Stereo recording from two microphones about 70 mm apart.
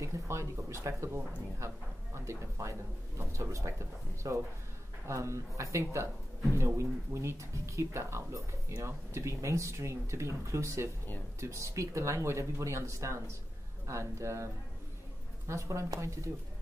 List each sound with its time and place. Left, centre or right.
0.0 s speech: right